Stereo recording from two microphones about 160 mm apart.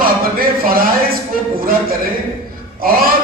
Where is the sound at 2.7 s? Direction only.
65° right (ahead or behind).